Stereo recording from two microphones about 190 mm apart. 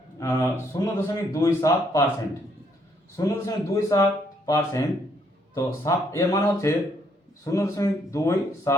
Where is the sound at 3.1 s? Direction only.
15° left (ahead or behind).